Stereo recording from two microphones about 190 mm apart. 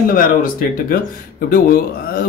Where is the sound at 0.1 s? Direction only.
50° left (ahead or behind).